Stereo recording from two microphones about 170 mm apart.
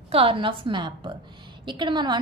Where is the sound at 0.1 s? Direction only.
35° right (ahead or behind).